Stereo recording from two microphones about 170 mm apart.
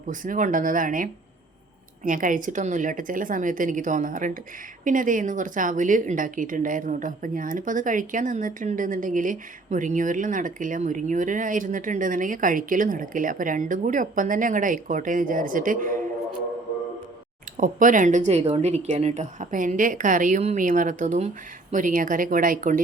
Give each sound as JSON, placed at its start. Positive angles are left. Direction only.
{"t": 0.1, "sound": "a woman's voice", "side_deg": -50}
{"t": 17.6, "sound": "a woman's voice", "side_deg": -50}